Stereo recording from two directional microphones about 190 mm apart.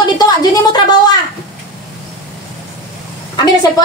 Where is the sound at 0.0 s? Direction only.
20° left (ahead or behind).